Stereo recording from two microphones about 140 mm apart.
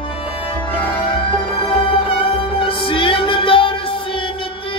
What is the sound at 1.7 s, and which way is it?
Music, 40° left (ahead or behind).